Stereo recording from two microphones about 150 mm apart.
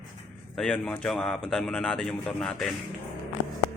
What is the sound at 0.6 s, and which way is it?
Speech, 5° left (ahead or behind).